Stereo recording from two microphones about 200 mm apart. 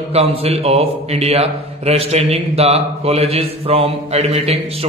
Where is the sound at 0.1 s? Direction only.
30° right (ahead or behind).